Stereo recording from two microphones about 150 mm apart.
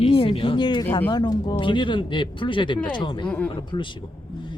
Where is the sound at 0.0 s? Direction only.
40° left (ahead or behind).